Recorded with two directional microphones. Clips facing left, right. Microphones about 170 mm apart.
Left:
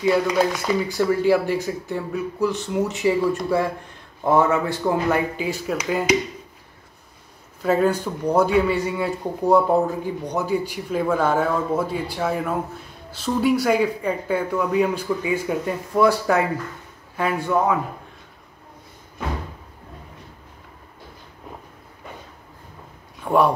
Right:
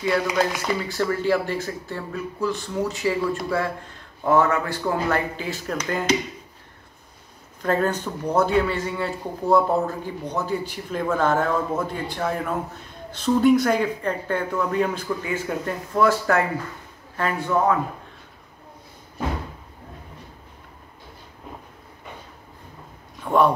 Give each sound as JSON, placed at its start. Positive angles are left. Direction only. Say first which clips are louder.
{"t": 0.0, "sound": "speech", "louder": "left 3 dB", "side_deg": 10}
{"t": 7.6, "sound": "speech", "louder": "left 3 dB", "side_deg": 10}
{"t": 23.2, "sound": "speech", "louder": "left 1 dB", "side_deg": 10}